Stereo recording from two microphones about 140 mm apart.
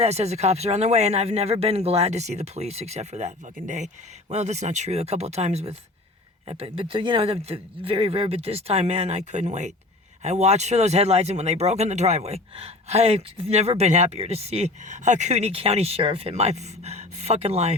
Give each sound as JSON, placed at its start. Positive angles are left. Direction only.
{"t": 0.0, "sound": "speech", "side_deg": -50}